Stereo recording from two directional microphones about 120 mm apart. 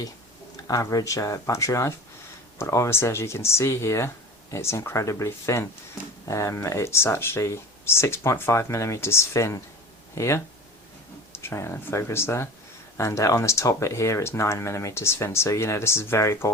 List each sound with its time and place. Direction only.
0.7 s speech: 30° left (ahead or behind)